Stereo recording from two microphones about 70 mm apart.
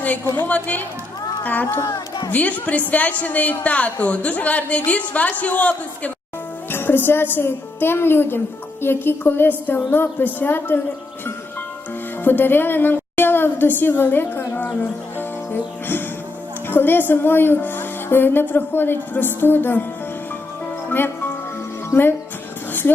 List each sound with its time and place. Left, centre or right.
0.4 s a woman's voice: left
12.2 s a woman's voice: left
15.2 s music: left
16.6 s a woman's voice: left
21.8 s speech: left